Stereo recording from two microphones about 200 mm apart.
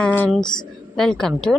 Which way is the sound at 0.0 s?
5° left (ahead or behind).